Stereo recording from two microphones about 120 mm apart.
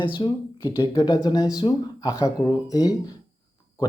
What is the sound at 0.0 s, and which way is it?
Speech, 45° left (ahead or behind).